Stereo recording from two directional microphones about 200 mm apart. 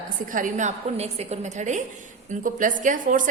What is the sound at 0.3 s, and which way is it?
A woman's voice, 40° right (ahead or behind).